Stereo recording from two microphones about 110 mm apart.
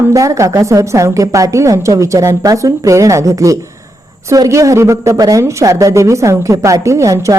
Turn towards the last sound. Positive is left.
turn(degrees=-30)  # may be behind; listen again after turning